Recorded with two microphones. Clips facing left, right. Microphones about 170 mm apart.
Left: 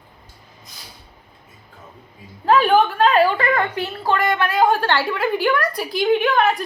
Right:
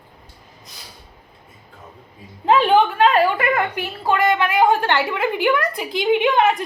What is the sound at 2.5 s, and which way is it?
A woman's voice, 20° right (ahead or behind).